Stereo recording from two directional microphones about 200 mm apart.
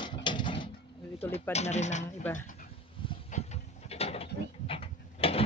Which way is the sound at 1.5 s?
35° left (ahead or behind).